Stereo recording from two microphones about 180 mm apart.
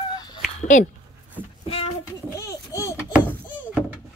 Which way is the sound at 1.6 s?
35° left (ahead or behind).